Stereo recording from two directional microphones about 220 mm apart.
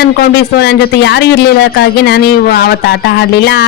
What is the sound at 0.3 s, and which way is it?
Speech, 45° left (ahead or behind).